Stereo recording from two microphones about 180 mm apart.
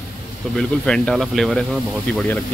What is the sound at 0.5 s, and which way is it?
Speech, 5° left (ahead or behind).